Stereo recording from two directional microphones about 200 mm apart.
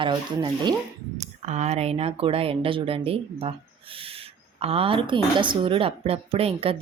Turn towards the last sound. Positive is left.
turn(degrees=-30)  # may be behind; listen again after turning